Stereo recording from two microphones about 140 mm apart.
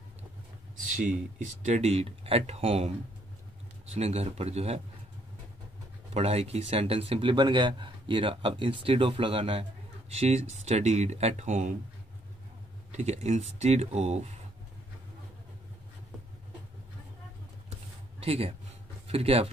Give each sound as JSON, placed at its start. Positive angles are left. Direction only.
{"t": 1.6, "sound": "speech", "side_deg": -50}
{"t": 6.1, "sound": "speech", "side_deg": -50}
{"t": 12.9, "sound": "speech", "side_deg": -50}
{"t": 18.2, "sound": "speech", "side_deg": -45}